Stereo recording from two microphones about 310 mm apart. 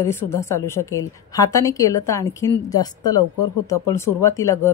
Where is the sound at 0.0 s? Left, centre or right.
Centre.